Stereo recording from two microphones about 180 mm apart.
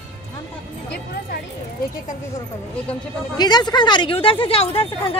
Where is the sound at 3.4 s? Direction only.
25° left (ahead or behind).